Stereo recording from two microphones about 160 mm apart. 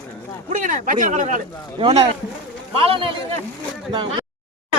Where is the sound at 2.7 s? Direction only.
35° right (ahead or behind).